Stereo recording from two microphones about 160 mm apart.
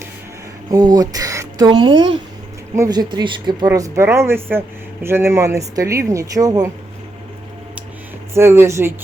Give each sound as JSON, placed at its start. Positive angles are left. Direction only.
{"t": 0.7, "sound": "speech", "side_deg": -25}
{"t": 8.3, "sound": "speech", "side_deg": -15}